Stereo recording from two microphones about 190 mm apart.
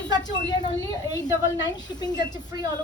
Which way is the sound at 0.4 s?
20° left (ahead or behind).